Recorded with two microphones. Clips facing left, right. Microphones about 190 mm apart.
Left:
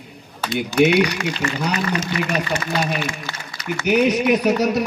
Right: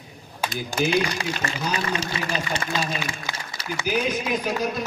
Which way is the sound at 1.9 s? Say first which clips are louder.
Left 5 dB; 30° right (ahead or behind).